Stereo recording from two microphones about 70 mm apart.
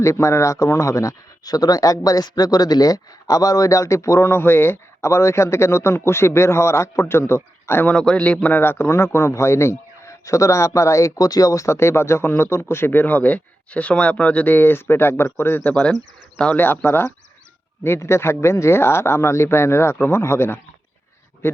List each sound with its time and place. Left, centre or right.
0.0 s speech: left
7.9 s a man's voice: centre
8.5 s speech: left
15.6 s a man's voice: centre
16.6 s speech: left